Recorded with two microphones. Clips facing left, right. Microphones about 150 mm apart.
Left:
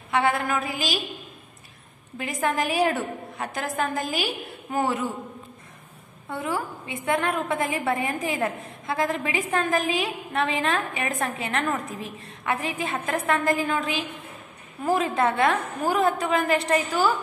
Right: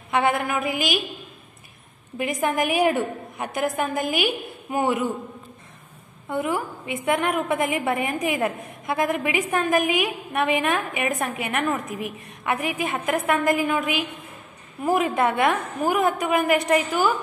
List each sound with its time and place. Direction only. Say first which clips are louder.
0.1 s a woman's voice: right 1 dB; 15° right (ahead or behind)
2.1 s a woman's voice: right 2 dB; 15° right (ahead or behind)
6.3 s a woman's voice: right 3 dB; 20° right (ahead or behind)